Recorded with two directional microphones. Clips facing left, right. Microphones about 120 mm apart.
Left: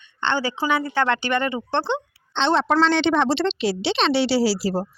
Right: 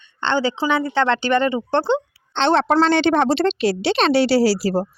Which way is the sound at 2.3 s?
60° right (ahead or behind).